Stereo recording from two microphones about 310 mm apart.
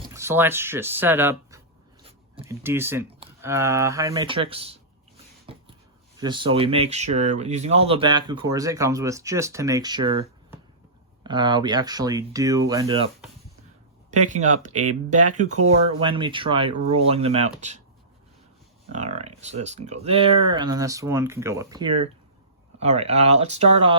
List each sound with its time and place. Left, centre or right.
0.1 s speech: centre
5.5 s a sound: centre
6.1 s speech: centre
14.3 s speech: right
18.9 s speech: right